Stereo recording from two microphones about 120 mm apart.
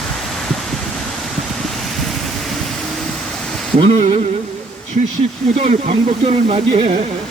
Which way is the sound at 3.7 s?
50° right (ahead or behind).